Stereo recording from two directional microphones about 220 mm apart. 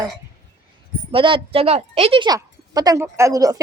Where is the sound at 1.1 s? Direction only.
25° right (ahead or behind).